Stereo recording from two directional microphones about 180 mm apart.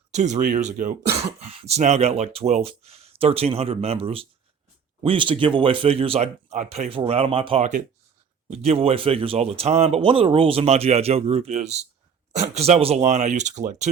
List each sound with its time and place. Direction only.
0.1 s speech: 40° right (ahead or behind)